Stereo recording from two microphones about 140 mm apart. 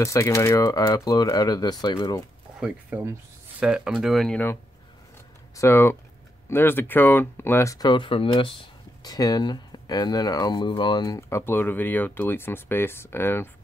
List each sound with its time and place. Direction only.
0.0 s speech: 20° left (ahead or behind)
2.9 s speech: 10° right (ahead or behind)
5.6 s speech: 20° left (ahead or behind); by 8.5 s 40° left (ahead or behind)
9.0 s speech: 25° left (ahead or behind)